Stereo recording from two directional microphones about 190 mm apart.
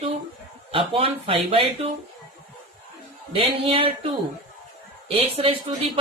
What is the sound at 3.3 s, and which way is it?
Speech, 30° right (ahead or behind).